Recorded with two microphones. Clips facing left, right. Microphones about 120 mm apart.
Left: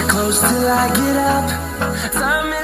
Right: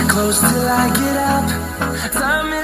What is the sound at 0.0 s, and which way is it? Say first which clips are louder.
Music: right 1 dB; centre (ahead or behind).